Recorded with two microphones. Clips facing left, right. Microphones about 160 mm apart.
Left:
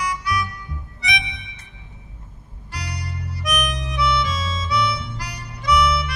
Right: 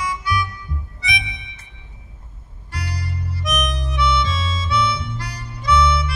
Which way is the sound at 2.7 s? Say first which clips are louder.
Right 2 dB; 25° right (ahead or behind).